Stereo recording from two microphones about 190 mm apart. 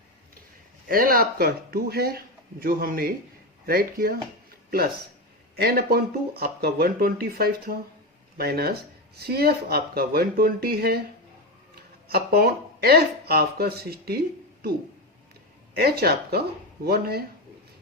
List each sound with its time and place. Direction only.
0.9 s speech: 50° right (ahead or behind)
5.5 s speech: 55° right (ahead or behind)
15.7 s speech: 55° right (ahead or behind)